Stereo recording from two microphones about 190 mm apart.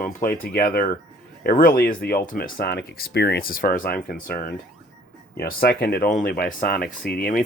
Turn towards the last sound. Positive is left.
turn(degrees=50)  # may be behind; listen again after turning